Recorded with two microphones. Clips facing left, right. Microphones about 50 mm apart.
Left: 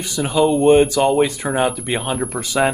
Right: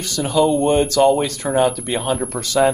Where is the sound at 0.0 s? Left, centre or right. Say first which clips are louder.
Even; centre.